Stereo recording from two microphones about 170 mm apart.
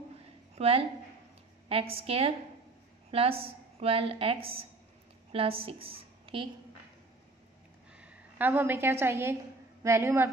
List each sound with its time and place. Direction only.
0.6 s a woman's voice: 35° right (ahead or behind)
8.0 s a woman's voice: 10° right (ahead or behind)